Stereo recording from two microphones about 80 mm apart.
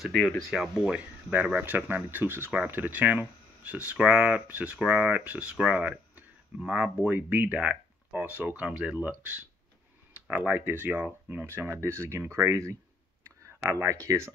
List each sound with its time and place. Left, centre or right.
0.0 s speech: centre
6.6 s speech: centre
7.1 s speech: right
8.6 s speech: centre
9.0 s speech: right
13.2 s a sound: right